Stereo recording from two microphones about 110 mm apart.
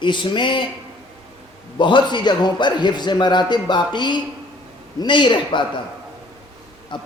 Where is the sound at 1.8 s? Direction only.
45° left (ahead or behind).